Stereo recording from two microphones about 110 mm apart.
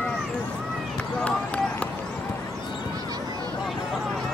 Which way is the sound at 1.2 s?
10° left (ahead or behind).